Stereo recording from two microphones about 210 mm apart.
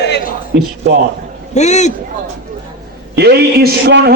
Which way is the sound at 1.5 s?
35° left (ahead or behind).